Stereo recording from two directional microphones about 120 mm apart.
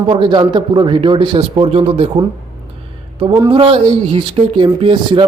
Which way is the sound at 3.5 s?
50° right (ahead or behind).